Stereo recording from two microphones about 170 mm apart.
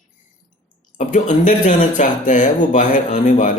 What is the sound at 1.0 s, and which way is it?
A man's voice, 50° left (ahead or behind).